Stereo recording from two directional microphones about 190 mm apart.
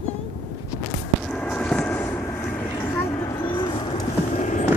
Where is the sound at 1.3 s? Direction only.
5° left (ahead or behind).